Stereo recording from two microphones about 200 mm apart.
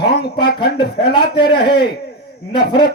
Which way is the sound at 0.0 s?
55° left (ahead or behind).